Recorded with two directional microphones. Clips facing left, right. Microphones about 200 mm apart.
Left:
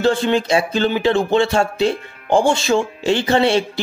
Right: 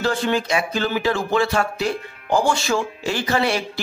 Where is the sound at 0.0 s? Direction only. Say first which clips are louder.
Left 5 dB; 25° left (ahead or behind).